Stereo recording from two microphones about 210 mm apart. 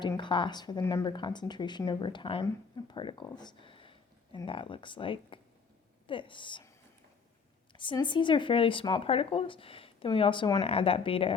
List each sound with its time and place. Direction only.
0.0 s speech: 20° left (ahead or behind)
7.7 s speech: 25° left (ahead or behind)